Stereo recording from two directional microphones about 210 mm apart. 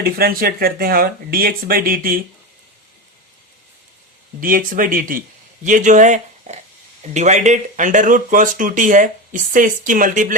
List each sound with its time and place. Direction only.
0.0 s speech: 45° right (ahead or behind)
4.4 s speech: 40° right (ahead or behind)